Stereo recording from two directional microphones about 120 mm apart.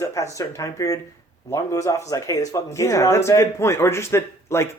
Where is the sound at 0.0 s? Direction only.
25° left (ahead or behind).